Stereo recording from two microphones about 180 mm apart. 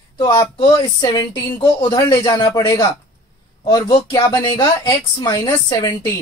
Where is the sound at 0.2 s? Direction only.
25° left (ahead or behind).